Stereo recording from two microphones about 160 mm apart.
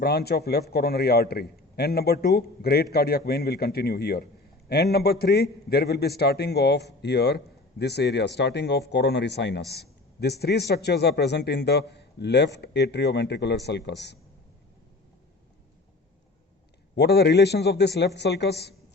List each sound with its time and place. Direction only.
0.0 s a man's voice: 80° left
16.9 s a man's voice: 90° left